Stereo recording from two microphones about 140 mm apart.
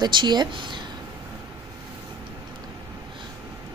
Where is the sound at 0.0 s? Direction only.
35° right (ahead or behind).